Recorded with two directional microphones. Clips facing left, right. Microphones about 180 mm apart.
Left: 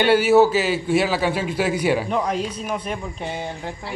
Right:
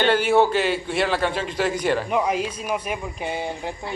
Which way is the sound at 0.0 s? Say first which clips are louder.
Left 3 dB; 5° left (ahead or behind).